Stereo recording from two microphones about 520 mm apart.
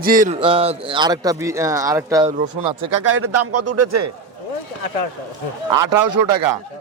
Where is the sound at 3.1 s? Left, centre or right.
Right.